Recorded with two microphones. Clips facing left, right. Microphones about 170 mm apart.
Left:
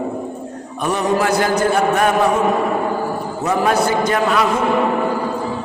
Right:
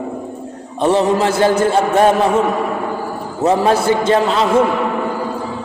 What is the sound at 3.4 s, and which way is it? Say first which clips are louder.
A man's voice: right 3 dB; 25° right (ahead or behind).